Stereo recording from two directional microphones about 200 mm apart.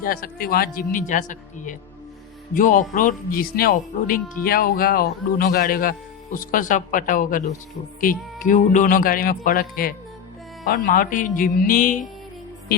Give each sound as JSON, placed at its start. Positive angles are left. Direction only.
{"t": 0.0, "sound": "speech", "side_deg": 45}